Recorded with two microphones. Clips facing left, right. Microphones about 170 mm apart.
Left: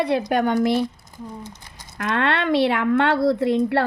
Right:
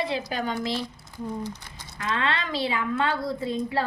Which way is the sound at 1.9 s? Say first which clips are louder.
Left 6 dB; 60° left (ahead or behind).